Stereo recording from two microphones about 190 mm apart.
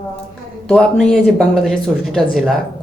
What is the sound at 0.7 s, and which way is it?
Speech, centre (ahead or behind).